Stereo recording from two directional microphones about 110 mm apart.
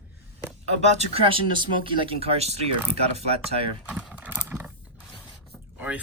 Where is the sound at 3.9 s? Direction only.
10° right (ahead or behind).